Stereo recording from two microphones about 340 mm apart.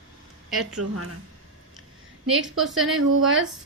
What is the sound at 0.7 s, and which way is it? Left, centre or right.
Speech, right.